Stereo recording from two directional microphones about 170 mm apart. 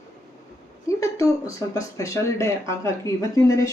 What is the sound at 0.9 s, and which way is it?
Speech, 20° left (ahead or behind).